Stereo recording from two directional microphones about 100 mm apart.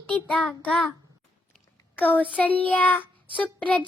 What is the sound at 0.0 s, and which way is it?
Child singing, 10° left (ahead or behind).